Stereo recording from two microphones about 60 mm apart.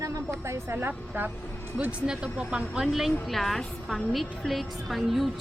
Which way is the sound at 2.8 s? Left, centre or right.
Centre.